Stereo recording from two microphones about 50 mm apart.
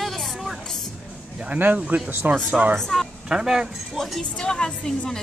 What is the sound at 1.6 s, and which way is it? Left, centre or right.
Speech, right.